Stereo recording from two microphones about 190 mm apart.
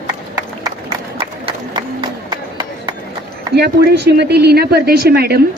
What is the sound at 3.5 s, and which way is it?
Speech, 60° right (ahead or behind).